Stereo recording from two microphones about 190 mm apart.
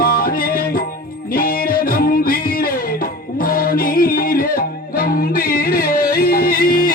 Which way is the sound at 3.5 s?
50° left (ahead or behind).